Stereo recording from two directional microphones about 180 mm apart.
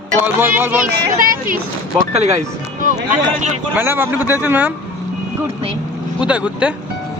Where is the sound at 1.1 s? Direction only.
50° right (ahead or behind).